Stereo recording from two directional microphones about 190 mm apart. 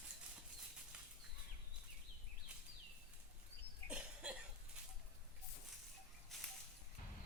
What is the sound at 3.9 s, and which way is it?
Cough, 5° right (ahead or behind).